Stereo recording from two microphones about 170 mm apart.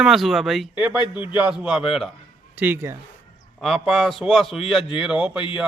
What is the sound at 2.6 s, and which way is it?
Speech, 10° right (ahead or behind).